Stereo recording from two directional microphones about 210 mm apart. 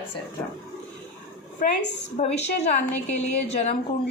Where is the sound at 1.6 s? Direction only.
40° left (ahead or behind).